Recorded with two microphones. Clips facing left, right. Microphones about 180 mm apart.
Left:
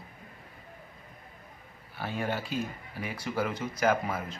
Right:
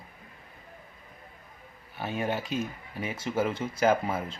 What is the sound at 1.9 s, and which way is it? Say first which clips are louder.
Speech: right 2 dB; 20° right (ahead or behind).